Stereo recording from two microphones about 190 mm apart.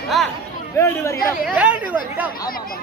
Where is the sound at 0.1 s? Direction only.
Centre (ahead or behind).